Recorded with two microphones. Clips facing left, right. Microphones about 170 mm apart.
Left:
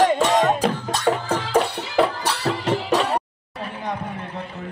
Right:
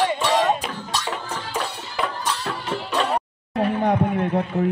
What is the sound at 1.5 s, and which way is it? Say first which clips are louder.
Music: left 10 dB; 70° left (ahead or behind).